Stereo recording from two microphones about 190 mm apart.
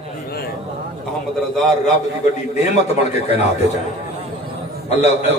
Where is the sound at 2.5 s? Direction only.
35° left (ahead or behind).